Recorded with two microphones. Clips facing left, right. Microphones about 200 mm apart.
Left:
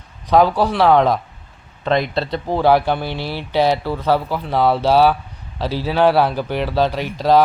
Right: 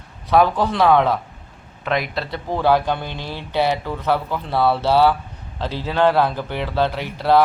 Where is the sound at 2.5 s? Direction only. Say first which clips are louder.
Left 2 dB; 10° left (ahead or behind).